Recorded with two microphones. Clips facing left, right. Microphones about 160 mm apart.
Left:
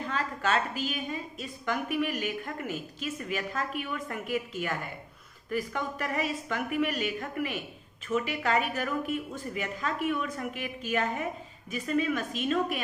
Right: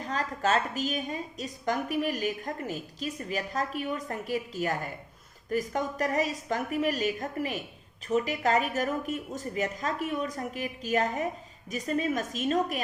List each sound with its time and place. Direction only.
0.0 s a woman's voice: 40° right (ahead or behind)